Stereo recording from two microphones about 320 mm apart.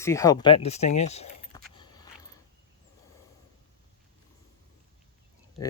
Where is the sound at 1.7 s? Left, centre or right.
Centre.